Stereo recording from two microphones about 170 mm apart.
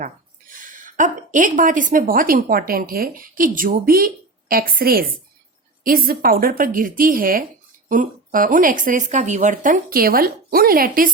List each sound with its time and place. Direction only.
0.0 s a woman's voice: 50° right (ahead or behind)